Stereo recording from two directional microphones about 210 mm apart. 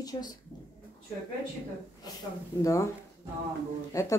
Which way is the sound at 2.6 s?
15° left (ahead or behind).